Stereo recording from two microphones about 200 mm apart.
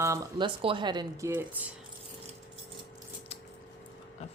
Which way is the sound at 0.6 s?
25° right (ahead or behind).